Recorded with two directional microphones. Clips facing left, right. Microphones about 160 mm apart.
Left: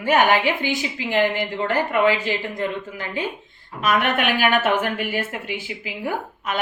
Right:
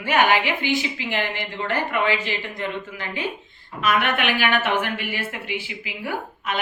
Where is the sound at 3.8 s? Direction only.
45° left (ahead or behind).